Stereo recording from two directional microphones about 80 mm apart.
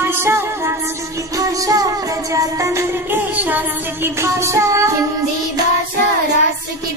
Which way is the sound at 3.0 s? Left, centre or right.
Right.